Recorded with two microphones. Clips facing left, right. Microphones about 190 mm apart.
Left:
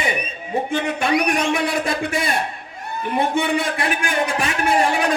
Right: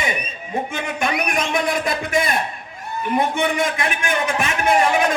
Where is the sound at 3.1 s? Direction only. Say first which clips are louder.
Even; 30° left (ahead or behind).